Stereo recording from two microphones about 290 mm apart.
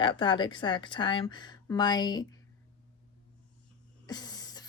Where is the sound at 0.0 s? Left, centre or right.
Centre.